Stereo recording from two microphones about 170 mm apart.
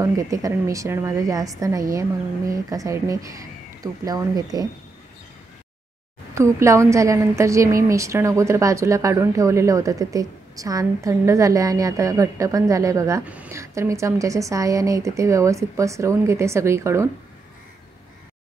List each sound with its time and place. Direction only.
0.0 s a woman's voice: 20° right (ahead or behind)
6.3 s a woman's voice: 15° right (ahead or behind)